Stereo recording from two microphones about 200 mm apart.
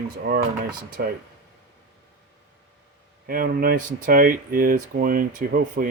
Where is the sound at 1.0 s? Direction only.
45° right (ahead or behind).